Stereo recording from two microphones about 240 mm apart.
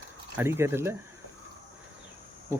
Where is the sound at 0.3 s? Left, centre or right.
Centre.